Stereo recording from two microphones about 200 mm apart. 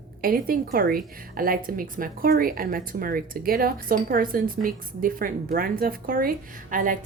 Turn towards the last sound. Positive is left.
turn(degrees=-40)  # may be behind; listen again after turning